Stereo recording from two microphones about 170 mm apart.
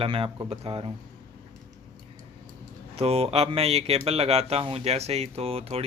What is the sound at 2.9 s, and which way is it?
Speech, 35° right (ahead or behind).